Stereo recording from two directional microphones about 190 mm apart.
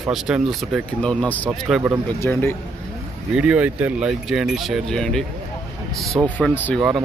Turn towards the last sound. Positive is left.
turn(degrees=0)  # may be behind; listen again after turning